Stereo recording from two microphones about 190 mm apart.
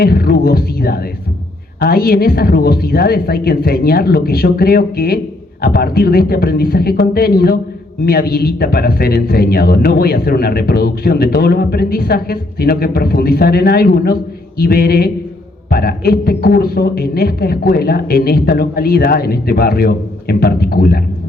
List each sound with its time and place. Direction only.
0.0 s a man's voice: 55° left (ahead or behind)